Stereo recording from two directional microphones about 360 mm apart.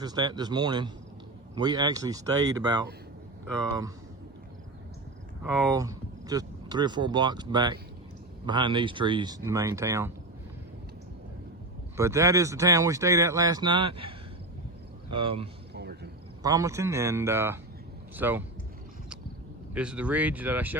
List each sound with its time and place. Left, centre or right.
0.0 s speech: centre
5.4 s speech: centre
11.9 s speech: centre
15.1 s speech: centre
15.7 s cricket: right
16.4 s speech: centre
19.7 s speech: centre